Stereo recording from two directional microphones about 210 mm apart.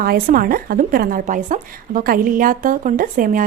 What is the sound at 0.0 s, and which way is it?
A woman's voice, 45° right (ahead or behind).